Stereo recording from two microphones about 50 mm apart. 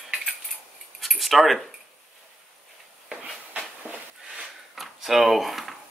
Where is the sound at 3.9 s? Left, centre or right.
Right.